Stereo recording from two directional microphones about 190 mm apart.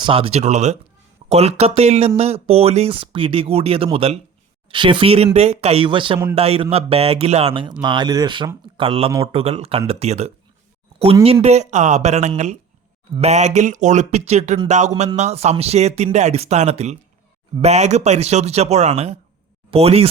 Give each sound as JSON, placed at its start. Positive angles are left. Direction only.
{"t": 0.0, "sound": "speech", "side_deg": -30}